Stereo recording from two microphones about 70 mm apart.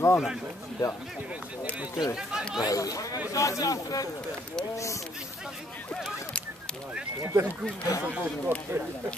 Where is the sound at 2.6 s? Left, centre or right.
Left.